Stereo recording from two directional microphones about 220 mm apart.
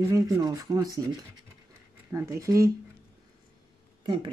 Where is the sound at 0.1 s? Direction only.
15° right (ahead or behind).